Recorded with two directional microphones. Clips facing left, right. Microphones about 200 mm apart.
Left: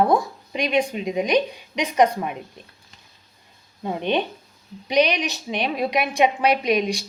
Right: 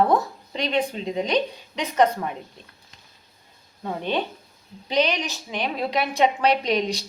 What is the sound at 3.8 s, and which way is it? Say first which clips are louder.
Speech: left 3 dB; 20° left (ahead or behind).